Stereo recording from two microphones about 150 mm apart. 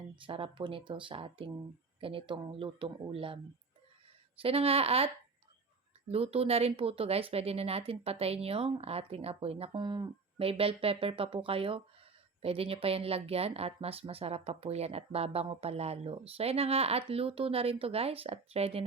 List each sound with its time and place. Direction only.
0.3 s a woman's voice: 35° right (ahead or behind)
4.4 s a woman's voice: 40° right (ahead or behind)